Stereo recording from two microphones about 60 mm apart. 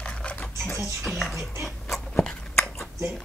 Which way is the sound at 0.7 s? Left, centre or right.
Centre.